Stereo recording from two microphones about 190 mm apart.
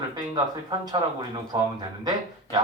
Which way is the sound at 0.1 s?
20° right (ahead or behind).